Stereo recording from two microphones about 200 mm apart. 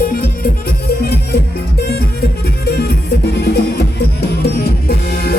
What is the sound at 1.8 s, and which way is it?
Music, 50° left (ahead or behind).